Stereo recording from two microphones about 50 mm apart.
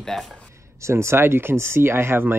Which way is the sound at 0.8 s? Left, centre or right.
Right.